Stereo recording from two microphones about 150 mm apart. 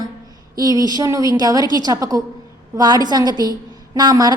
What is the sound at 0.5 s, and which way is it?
A woman's voice, 25° right (ahead or behind).